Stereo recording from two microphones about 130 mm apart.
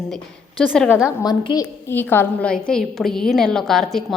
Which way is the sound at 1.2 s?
35° left (ahead or behind).